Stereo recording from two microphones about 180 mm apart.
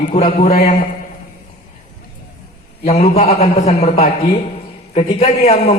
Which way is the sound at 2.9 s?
35° left (ahead or behind).